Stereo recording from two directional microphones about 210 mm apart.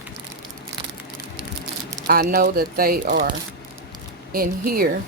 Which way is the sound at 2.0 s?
45° right (ahead or behind).